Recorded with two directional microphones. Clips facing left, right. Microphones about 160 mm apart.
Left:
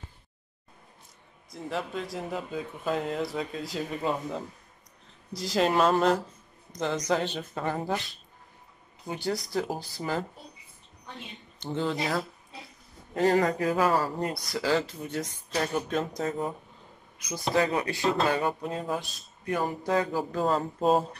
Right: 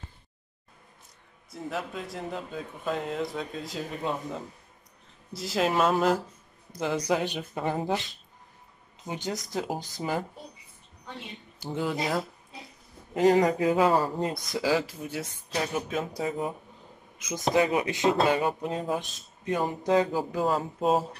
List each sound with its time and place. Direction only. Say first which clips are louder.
1.5 s a man's voice: left 1 dB; centre (ahead or behind); by 7.9 s 15° right (ahead or behind)
9.0 s speech: left 2 dB; 20° right (ahead or behind)
11.6 s speech: even; 10° right (ahead or behind)
17.2 s speech: right 2 dB; 20° right (ahead or behind)
20.3 s speech: left 1 dB; 5° right (ahead or behind)